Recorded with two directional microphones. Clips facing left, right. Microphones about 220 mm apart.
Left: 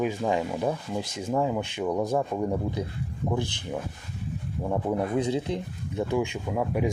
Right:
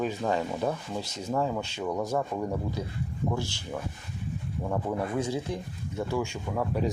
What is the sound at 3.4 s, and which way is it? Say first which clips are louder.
Speech: left 3 dB; 55° left (ahead or behind).